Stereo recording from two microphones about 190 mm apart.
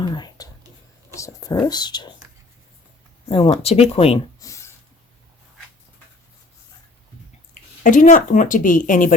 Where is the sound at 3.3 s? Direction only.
30° left (ahead or behind).